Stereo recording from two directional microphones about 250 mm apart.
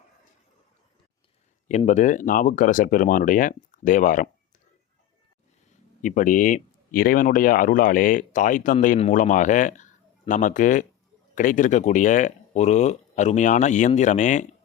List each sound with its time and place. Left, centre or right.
1.6 s speech: left
6.0 s speech: left